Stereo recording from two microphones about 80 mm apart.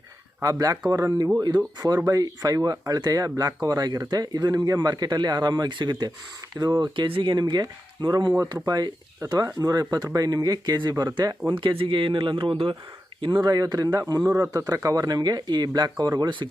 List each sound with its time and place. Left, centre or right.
0.4 s a man's voice: right
11.4 s speech: right
13.2 s a man's voice: right